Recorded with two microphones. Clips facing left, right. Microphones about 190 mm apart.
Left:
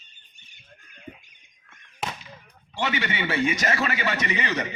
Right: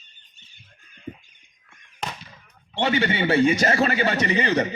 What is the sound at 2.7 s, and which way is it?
A man's voice, 30° right (ahead or behind).